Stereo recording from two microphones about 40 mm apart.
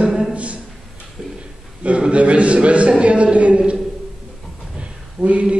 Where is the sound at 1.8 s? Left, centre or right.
Right.